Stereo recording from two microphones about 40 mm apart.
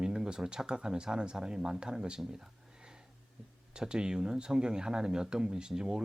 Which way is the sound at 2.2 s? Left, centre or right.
Centre.